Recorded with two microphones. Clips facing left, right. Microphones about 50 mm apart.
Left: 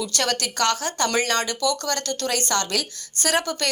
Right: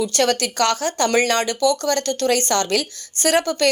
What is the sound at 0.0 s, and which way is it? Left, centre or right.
Speech, right.